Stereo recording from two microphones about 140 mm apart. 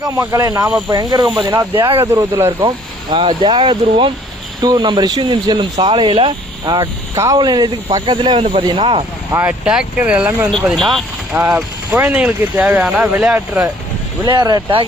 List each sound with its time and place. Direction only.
0.0 s speech: 25° right (ahead or behind)
6.7 s speech: 25° right (ahead or behind); by 9.0 s 40° right (ahead or behind)
9.3 s speech: 10° right (ahead or behind)
11.3 s speech: 10° right (ahead or behind)
14.3 s speech: 30° right (ahead or behind)